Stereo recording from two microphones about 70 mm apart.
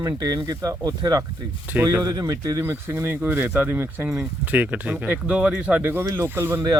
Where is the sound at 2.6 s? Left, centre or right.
Right; by 5.9 s centre.